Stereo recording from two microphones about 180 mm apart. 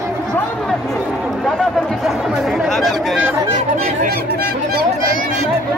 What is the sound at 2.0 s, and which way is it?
Chatter, centre (ahead or behind).